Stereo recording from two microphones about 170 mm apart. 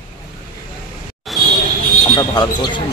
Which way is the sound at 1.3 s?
Centre (ahead or behind).